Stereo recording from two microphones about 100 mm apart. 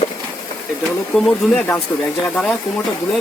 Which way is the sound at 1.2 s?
10° left (ahead or behind).